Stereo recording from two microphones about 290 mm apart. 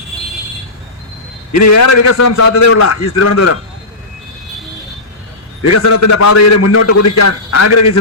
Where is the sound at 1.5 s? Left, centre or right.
Left.